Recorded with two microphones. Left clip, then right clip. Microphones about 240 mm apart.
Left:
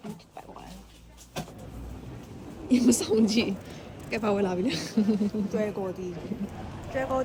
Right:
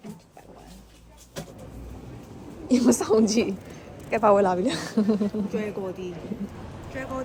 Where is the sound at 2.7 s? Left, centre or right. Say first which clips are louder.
Right 2 dB; centre.